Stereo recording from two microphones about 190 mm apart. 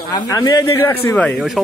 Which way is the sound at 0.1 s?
20° left (ahead or behind).